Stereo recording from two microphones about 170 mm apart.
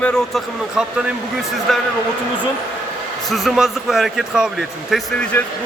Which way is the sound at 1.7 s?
Centre (ahead or behind).